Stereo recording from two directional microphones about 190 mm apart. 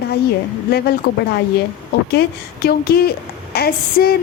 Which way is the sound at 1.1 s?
60° left (ahead or behind).